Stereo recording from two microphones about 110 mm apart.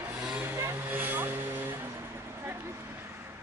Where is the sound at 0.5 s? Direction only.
20° right (ahead or behind).